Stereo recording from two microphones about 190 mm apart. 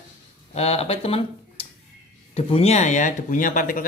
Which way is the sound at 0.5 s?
35° left (ahead or behind).